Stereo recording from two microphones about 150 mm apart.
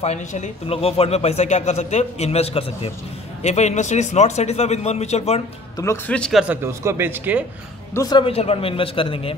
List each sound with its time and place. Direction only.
0.0 s speech: 50° left (ahead or behind)
6.0 s speech: 5° left (ahead or behind)
6.4 s speech: 15° right (ahead or behind)
7.9 s a man's voice: 25° left (ahead or behind)
8.3 s a man's voice: 40° left (ahead or behind)